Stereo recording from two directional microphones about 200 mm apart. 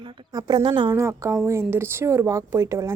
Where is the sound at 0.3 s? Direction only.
20° right (ahead or behind).